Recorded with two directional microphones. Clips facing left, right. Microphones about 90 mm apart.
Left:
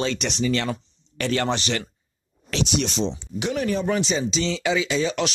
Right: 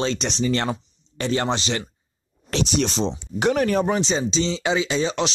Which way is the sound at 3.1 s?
55° right (ahead or behind).